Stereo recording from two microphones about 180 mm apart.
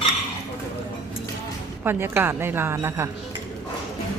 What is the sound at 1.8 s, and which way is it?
A woman's voice, 10° right (ahead or behind).